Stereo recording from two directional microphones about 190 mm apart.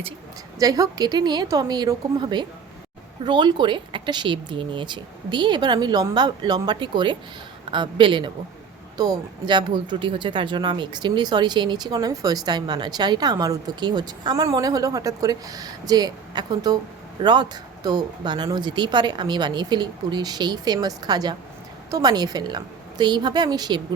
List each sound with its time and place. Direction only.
0.6 s speech: 20° right (ahead or behind)